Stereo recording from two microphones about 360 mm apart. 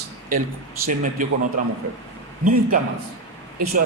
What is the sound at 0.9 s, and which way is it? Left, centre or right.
Speech, right.